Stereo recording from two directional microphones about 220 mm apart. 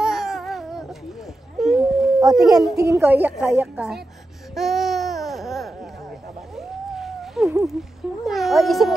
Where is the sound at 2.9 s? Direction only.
10° right (ahead or behind).